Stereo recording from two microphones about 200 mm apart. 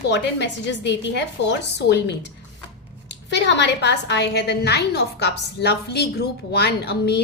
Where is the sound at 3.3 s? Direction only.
60° left (ahead or behind).